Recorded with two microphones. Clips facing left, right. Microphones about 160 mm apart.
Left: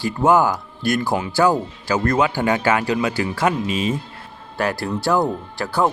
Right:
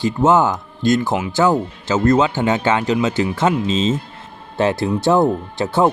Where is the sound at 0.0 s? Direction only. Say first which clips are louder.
Right 2 dB; 20° right (ahead or behind).